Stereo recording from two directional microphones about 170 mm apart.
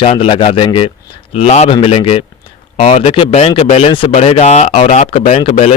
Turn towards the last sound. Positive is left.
turn(degrees=35)  # may be behind; listen again after turning